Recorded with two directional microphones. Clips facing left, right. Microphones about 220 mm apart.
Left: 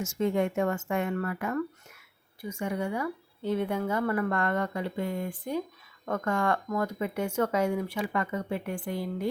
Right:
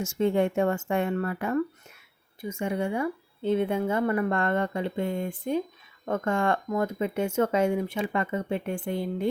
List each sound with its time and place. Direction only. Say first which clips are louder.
0.0 s a woman's voice: right 3 dB; 30° right (ahead or behind)